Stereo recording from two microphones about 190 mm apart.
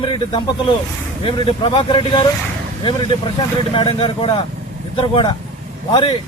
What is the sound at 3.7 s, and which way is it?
A man's voice, 30° left (ahead or behind).